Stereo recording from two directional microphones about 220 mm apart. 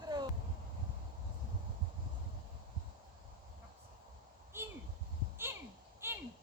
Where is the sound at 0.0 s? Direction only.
20° right (ahead or behind).